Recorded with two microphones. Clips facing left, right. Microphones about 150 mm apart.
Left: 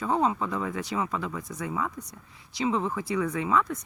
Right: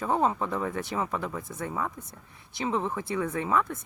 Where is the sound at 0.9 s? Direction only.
35° right (ahead or behind).